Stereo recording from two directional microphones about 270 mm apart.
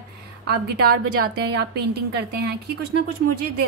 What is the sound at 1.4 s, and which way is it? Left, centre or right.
Speech, right.